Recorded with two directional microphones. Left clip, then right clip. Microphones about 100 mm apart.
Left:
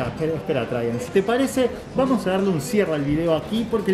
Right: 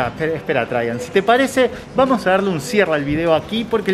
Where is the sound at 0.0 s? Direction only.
15° right (ahead or behind).